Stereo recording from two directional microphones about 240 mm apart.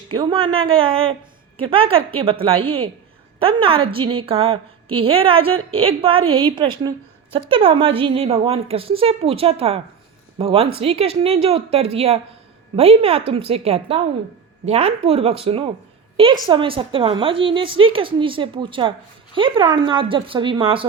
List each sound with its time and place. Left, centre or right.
0.1 s a woman's voice: right